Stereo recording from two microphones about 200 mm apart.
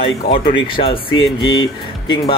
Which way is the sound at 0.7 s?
25° left (ahead or behind).